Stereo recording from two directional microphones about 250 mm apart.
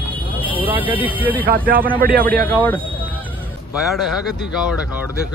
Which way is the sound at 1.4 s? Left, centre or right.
Right.